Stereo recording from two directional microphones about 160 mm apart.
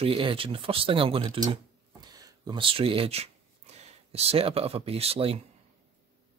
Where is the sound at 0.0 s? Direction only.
35° right (ahead or behind).